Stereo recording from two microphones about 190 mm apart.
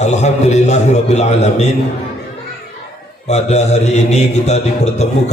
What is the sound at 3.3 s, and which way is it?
Mantra, 35° left (ahead or behind).